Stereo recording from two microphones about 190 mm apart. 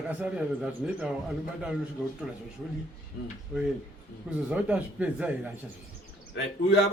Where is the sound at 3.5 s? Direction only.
5° right (ahead or behind).